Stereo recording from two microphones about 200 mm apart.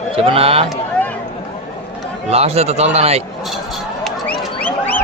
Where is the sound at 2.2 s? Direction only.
30° right (ahead or behind).